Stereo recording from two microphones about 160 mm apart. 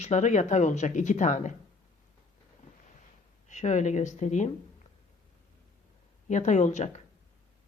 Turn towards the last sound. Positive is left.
turn(degrees=45)  # may be behind; listen again after turning